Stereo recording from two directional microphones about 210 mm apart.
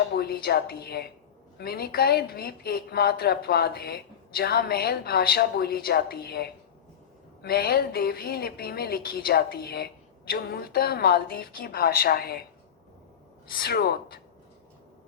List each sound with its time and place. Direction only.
0.1 s a woman's voice: 45° left (ahead or behind)
13.5 s a woman's voice: 45° left (ahead or behind)